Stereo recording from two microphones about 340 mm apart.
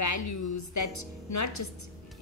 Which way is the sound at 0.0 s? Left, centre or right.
Left.